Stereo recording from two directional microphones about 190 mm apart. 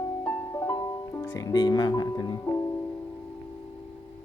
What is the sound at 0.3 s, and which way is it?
Music, 15° left (ahead or behind).